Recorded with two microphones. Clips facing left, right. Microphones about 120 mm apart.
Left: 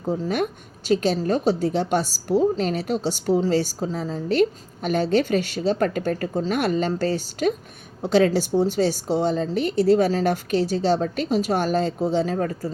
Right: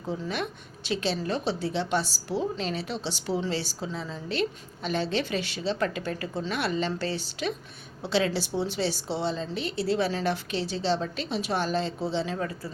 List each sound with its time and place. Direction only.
0.0 s a woman's voice: 45° left (ahead or behind)